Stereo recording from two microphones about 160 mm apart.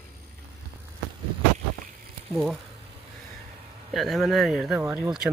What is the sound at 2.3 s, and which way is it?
Speech, 5° right (ahead or behind).